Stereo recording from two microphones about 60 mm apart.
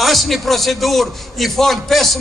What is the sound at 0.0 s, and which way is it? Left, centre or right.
A man's voice, centre.